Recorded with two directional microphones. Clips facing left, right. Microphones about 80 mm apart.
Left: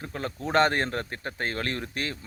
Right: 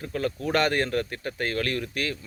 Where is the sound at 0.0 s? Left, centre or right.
Left.